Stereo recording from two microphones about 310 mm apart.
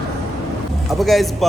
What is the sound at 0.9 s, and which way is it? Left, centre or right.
Speech, centre.